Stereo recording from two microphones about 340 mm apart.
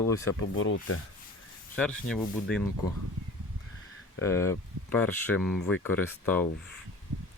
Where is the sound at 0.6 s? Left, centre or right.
Left.